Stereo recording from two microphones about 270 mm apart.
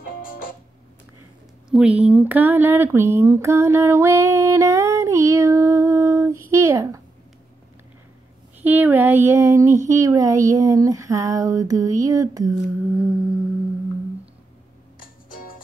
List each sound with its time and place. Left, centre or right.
0.0 s music: left
1.7 s speech: centre
8.6 s speech: centre